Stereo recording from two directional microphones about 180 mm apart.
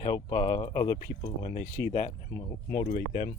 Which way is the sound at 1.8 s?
50° left (ahead or behind).